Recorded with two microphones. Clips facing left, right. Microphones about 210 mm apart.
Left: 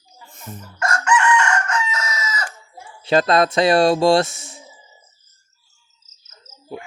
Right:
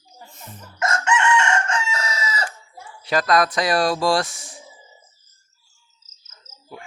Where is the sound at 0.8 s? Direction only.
25° right (ahead or behind).